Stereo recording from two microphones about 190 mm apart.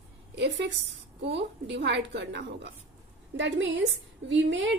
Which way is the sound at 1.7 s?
65° right (ahead or behind).